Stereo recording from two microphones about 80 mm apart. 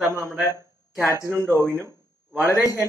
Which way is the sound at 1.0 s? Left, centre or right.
Left.